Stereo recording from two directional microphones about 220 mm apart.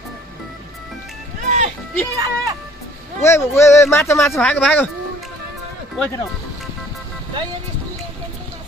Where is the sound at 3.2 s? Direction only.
15° left (ahead or behind).